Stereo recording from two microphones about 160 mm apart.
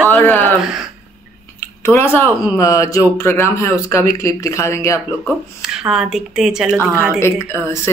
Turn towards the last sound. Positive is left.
turn(degrees=15)  # may be behind; listen again after turning